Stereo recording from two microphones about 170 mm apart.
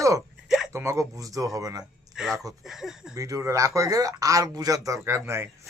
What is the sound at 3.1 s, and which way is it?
Speech, 20° right (ahead or behind).